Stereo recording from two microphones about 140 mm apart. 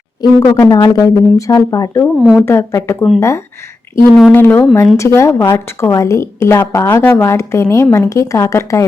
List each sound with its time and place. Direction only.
0.2 s speech: 40° left (ahead or behind)
0.5 s a woman's voice: 20° left (ahead or behind)